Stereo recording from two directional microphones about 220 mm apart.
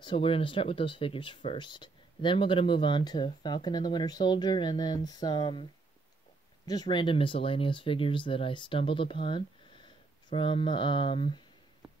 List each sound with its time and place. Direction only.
0.0 s speech: 25° left (ahead or behind)